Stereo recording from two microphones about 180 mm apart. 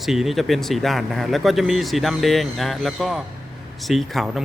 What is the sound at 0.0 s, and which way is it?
Speech, centre (ahead or behind).